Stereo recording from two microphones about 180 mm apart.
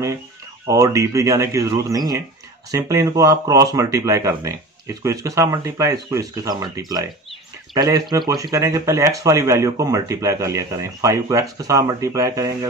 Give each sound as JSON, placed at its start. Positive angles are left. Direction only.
{"t": 0.7, "sound": "speech", "side_deg": -15}